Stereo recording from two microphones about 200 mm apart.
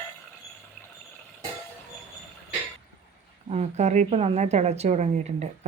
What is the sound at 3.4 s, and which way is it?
A woman's voice, 35° right (ahead or behind).